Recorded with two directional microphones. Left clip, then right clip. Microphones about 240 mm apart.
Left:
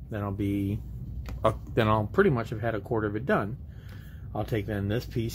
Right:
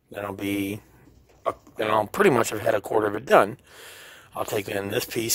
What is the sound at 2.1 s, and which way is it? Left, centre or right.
Speech, right.